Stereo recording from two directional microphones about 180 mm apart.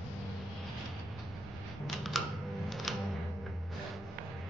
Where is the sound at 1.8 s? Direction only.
Centre (ahead or behind).